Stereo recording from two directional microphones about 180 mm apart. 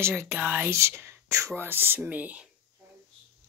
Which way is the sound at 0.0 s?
15° right (ahead or behind).